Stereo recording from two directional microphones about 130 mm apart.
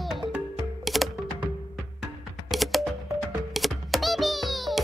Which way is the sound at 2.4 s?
Centre (ahead or behind).